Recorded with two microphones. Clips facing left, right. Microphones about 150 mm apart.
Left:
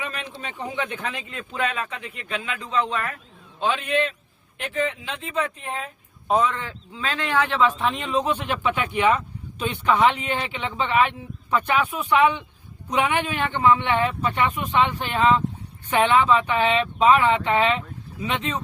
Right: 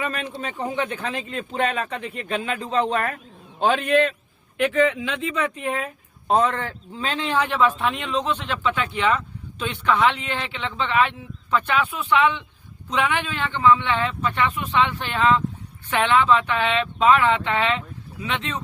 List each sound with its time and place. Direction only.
0.0 s a man's voice: 50° right (ahead or behind)
4.5 s speech: 65° right (ahead or behind); by 5.9 s 85° right
6.3 s a man's voice: 55° right (ahead or behind)
6.9 s speech: 30° right (ahead or behind)
7.3 s speech: 15° right (ahead or behind)
7.8 s speech: centre (ahead or behind)